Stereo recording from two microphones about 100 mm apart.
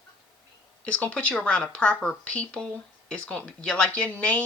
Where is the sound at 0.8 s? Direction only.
10° left (ahead or behind).